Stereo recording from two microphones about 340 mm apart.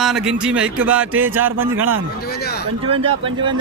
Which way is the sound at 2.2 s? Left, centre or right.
Left.